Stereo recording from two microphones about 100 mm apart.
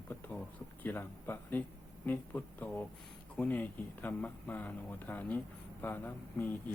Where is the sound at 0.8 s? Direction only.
20° left (ahead or behind).